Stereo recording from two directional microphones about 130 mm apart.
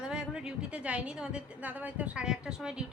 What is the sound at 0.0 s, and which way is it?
A woman's voice, 5° right (ahead or behind).